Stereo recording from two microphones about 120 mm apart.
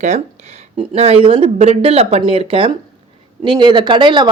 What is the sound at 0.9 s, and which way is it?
Speech, 55° right (ahead or behind).